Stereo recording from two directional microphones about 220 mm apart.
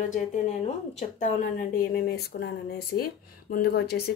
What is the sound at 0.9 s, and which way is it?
Speech, 35° left (ahead or behind).